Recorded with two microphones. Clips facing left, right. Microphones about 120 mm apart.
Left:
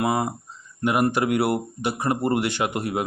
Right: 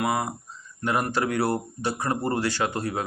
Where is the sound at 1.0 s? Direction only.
20° left (ahead or behind).